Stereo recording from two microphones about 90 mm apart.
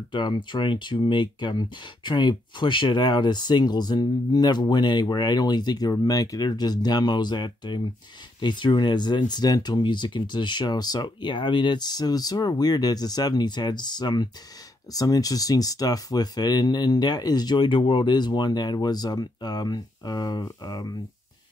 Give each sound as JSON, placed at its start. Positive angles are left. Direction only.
{"t": 0.1, "sound": "speech", "side_deg": 55}
{"t": 14.9, "sound": "speech", "side_deg": 40}